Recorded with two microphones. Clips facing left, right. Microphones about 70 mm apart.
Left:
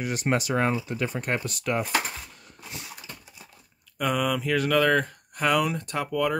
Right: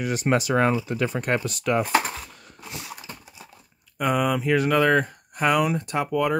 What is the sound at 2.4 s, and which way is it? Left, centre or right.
Dog, right.